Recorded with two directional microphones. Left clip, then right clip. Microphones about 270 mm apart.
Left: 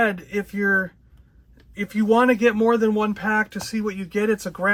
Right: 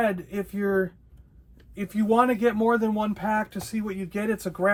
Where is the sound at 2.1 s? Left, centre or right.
Left.